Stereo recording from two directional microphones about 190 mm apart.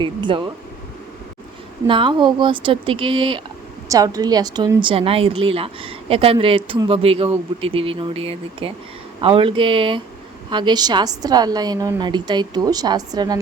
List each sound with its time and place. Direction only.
0.0 s speech: 25° right (ahead or behind)
1.9 s speech: 25° right (ahead or behind)